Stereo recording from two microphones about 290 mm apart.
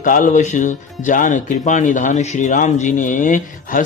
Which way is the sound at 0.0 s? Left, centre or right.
Left.